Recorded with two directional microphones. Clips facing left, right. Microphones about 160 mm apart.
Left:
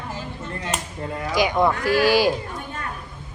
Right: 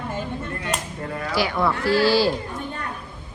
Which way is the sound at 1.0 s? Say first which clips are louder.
Left 3 dB; 20° left (ahead or behind).